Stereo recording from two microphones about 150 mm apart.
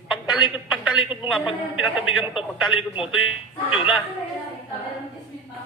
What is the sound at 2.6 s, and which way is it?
A man's voice, 35° left (ahead or behind).